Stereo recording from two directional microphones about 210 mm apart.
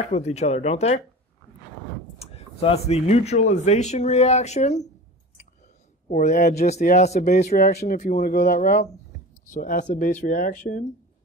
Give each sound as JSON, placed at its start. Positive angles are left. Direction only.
{"t": 0.1, "sound": "speech", "side_deg": 30}
{"t": 2.1, "sound": "speech", "side_deg": 30}
{"t": 6.0, "sound": "speech", "side_deg": 35}